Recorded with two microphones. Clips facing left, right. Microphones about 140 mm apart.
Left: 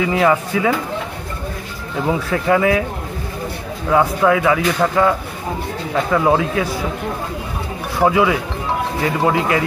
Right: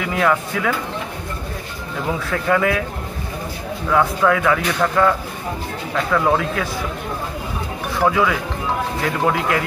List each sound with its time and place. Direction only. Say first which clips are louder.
0.1 s speech: left 3 dB; 15° left (ahead or behind)
2.0 s speech: left 3 dB; 15° left (ahead or behind)
3.9 s speech: left 2 dB; 15° left (ahead or behind)
8.0 s speech: left 3 dB; 20° left (ahead or behind)